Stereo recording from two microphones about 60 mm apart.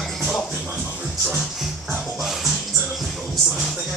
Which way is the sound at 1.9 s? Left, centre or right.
Centre.